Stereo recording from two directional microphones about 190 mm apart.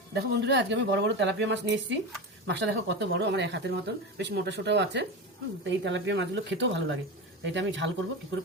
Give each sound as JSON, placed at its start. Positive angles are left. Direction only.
{"t": 0.1, "sound": "speech", "side_deg": -60}